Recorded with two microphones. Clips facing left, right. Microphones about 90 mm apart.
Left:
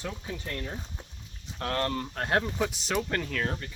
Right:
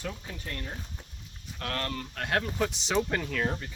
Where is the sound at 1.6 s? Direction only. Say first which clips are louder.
Left 4 dB; 30° left (ahead or behind).